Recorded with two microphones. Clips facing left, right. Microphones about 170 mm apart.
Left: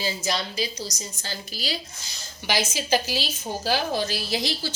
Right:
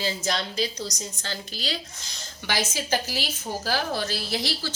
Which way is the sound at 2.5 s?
15° left (ahead or behind).